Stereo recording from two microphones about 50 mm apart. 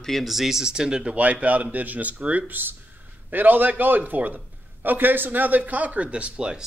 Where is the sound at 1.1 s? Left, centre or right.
Right.